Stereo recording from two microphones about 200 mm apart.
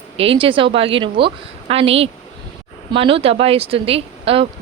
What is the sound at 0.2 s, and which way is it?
Speech, 25° right (ahead or behind).